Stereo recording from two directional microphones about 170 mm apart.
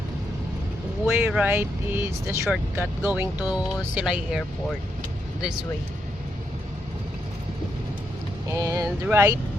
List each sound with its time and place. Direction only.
1.0 s speech: 10° right (ahead or behind)
8.4 s speech: 20° right (ahead or behind)